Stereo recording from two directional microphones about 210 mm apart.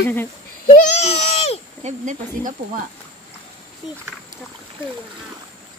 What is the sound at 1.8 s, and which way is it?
Speech, 35° right (ahead or behind).